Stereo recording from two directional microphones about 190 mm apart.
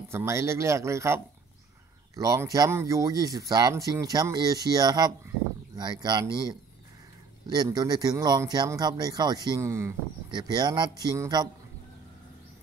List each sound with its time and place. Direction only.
0.1 s speech: 15° right (ahead or behind)